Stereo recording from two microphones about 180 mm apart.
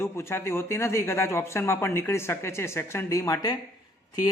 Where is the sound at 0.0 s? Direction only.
15° left (ahead or behind).